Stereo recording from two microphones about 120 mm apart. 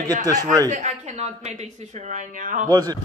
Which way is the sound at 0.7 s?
75° right (ahead or behind).